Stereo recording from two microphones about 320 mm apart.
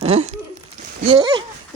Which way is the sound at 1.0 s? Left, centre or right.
Centre.